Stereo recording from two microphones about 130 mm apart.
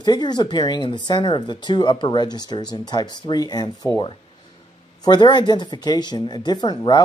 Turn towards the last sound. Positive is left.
turn(degrees=35)  # may be behind; listen again after turning